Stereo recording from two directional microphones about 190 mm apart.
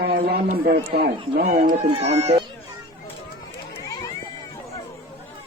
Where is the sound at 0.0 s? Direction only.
55° right (ahead or behind).